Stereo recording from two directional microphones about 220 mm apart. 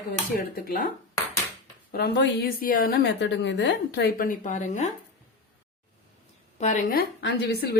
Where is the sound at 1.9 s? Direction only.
45° left (ahead or behind).